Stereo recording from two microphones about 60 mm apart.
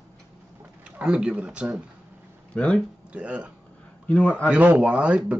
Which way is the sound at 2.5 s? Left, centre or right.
Centre.